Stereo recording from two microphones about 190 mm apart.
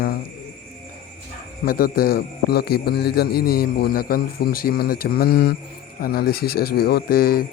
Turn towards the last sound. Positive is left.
turn(degrees=50)  # may be behind; listen again after turning